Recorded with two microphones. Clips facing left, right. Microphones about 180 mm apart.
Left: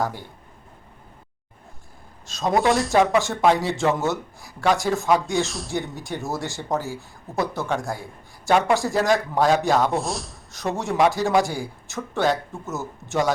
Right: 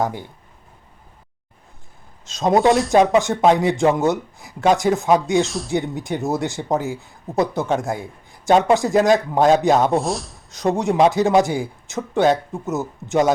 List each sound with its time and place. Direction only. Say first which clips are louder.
2.2 s speech: right 5 dB; 20° right (ahead or behind)
5.5 s speech: right 6 dB; centre (ahead or behind)
5.7 s speech: right 6 dB; 20° right (ahead or behind)
10.0 s speech: right 4 dB; centre (ahead or behind)
10.5 s speech: right 6 dB; 20° right (ahead or behind)